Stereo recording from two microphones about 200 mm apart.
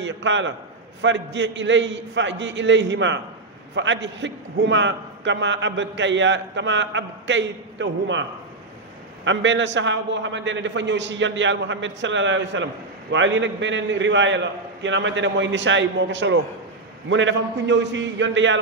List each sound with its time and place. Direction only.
0.0 s a man's voice: 65° right (ahead or behind)